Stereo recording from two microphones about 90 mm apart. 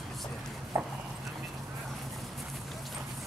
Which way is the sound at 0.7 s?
30° right (ahead or behind).